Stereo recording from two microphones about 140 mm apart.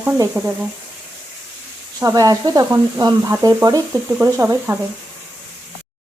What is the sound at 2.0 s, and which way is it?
Speech, 25° right (ahead or behind).